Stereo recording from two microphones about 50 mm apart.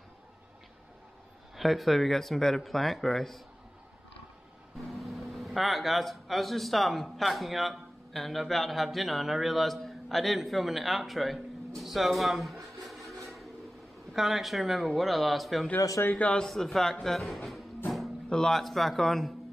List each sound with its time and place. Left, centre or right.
1.6 s speech: centre
4.7 s speech: centre
16.1 s a man's voice: left
16.3 s a man's voice: centre
17.8 s a sound: centre
18.3 s speech: centre